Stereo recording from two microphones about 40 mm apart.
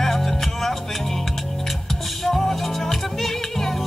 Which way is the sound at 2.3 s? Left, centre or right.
Centre.